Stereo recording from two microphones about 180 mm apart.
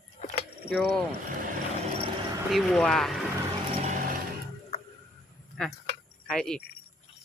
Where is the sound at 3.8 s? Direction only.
45° right (ahead or behind).